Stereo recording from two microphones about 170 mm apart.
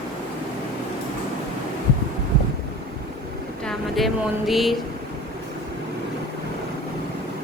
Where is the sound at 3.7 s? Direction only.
Centre (ahead or behind).